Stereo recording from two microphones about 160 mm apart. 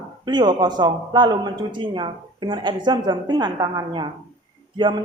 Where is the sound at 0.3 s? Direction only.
25° right (ahead or behind).